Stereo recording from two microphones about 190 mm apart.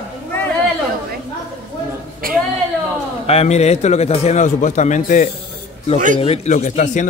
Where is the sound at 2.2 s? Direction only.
50° right (ahead or behind).